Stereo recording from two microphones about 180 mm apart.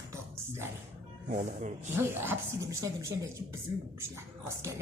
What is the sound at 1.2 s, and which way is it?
Speech, 45° right (ahead or behind).